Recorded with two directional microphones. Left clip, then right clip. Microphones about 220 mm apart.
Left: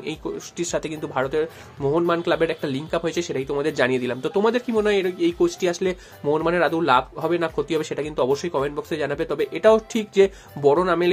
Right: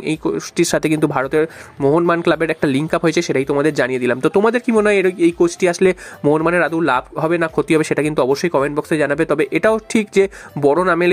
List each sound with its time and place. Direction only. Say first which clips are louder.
0.2 s speech: right 11 dB; 40° right (ahead or behind)